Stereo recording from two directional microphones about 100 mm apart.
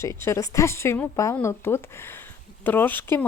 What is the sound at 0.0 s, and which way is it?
A woman's voice, 30° left (ahead or behind).